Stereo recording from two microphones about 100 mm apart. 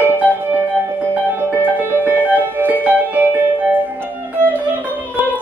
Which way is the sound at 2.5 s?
20° right (ahead or behind).